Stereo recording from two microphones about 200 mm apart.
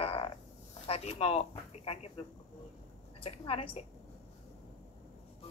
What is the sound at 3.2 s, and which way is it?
Speech, 30° left (ahead or behind).